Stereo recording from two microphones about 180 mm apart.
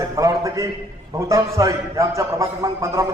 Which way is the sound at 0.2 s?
20° right (ahead or behind).